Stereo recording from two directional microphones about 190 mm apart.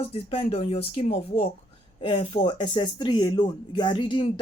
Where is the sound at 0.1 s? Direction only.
30° left (ahead or behind).